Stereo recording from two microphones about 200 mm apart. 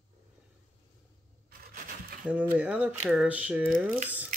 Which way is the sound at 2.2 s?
5° right (ahead or behind).